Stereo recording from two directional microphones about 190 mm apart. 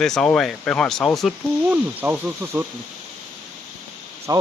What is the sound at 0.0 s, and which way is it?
Speech, 5° left (ahead or behind).